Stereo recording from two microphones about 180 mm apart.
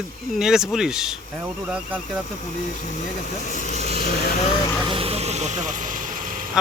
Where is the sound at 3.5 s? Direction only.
45° left (ahead or behind).